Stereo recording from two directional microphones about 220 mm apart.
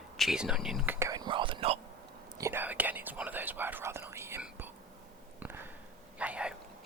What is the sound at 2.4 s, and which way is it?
Whispering, 10° right (ahead or behind).